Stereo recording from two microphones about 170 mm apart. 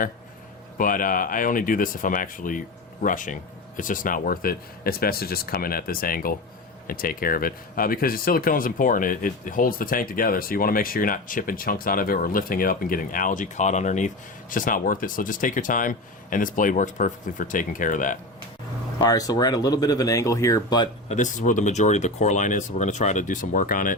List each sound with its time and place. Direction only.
0.8 s speech: 55° left (ahead or behind)
18.9 s speech: 20° left (ahead or behind)
21.1 s speech: 45° left (ahead or behind)